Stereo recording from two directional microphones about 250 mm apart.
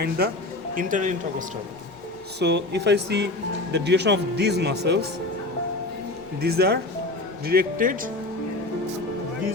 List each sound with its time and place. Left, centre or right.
0.8 s speech: right
2.4 s speech: right
6.4 s speech: right